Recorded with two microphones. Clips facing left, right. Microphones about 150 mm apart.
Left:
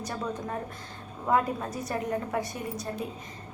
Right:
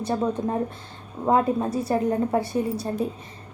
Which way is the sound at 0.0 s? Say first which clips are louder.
Right 9 dB; 30° right (ahead or behind).